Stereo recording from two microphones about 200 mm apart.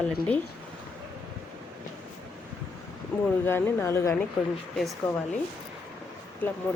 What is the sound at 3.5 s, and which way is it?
A woman's voice, 10° left (ahead or behind).